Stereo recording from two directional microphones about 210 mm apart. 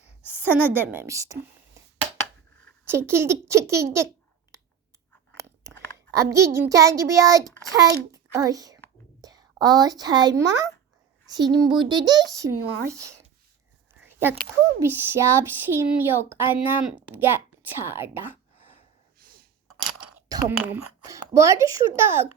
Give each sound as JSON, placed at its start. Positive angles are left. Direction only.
{"t": 0.3, "sound": "speech", "side_deg": -10}
{"t": 2.8, "sound": "speech", "side_deg": -10}
{"t": 6.1, "sound": "a child's voice", "side_deg": -15}
{"t": 14.0, "sound": "a sound", "side_deg": -10}
{"t": 14.8, "sound": "speech", "side_deg": -10}
{"t": 19.2, "sound": "a sound", "side_deg": -45}
{"t": 20.2, "sound": "speech", "side_deg": -15}